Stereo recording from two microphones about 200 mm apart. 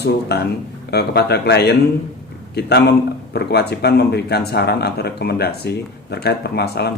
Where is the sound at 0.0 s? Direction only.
55° left (ahead or behind).